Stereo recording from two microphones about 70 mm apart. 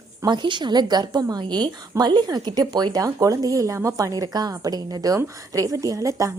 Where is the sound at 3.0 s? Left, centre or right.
Right.